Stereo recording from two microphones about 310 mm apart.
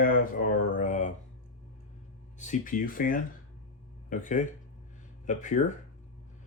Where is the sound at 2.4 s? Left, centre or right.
Left.